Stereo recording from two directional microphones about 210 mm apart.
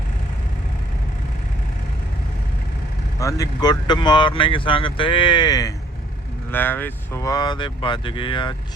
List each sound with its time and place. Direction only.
3.2 s speech: 15° left (ahead or behind)